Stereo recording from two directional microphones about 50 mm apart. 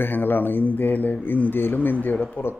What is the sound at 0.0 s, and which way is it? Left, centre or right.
A man's voice, left.